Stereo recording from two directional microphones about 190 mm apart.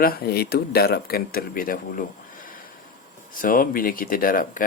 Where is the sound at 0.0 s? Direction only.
50° left (ahead or behind).